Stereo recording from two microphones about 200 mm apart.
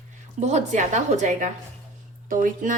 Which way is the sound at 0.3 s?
35° right (ahead or behind).